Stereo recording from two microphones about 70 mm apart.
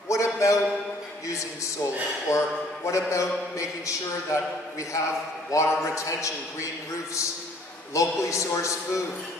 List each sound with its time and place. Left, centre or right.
0.1 s a sound: left
1.2 s speech: left
7.9 s speech: left